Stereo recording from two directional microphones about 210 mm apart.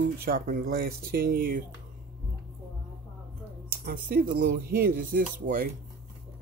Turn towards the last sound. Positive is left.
turn(degrees=-40)  # may be behind; listen again after turning